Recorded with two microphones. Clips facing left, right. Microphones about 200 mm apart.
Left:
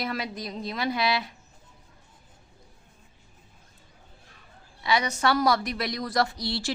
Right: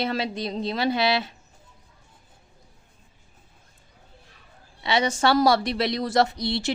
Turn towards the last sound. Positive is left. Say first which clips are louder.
# right 4 dB
turn(degrees=-20)  # may be behind; listen again after turning